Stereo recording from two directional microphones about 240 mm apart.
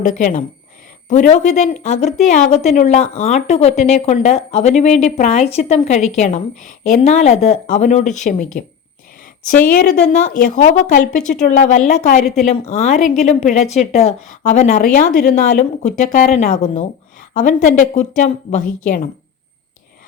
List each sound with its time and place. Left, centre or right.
0.0 s speech: left